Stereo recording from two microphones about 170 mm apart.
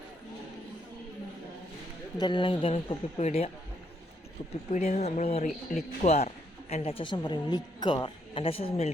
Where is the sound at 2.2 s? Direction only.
25° left (ahead or behind).